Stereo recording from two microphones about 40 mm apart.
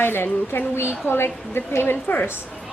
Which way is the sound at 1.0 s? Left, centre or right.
Left.